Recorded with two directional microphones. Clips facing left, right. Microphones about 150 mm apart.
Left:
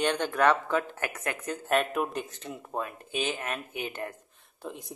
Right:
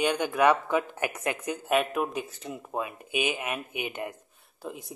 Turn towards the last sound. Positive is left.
turn(degrees=-5)  # may be behind; listen again after turning